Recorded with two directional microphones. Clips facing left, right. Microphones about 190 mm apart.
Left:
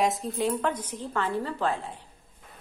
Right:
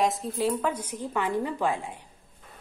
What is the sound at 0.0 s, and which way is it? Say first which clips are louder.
A woman's voice: even; centre (ahead or behind).